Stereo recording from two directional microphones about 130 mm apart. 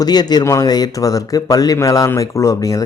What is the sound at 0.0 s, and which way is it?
A man's voice, 30° left (ahead or behind).